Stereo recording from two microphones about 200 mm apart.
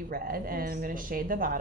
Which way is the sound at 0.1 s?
45° right (ahead or behind).